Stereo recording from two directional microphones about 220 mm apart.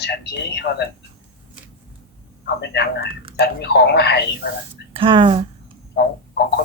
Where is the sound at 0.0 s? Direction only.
50° left (ahead or behind).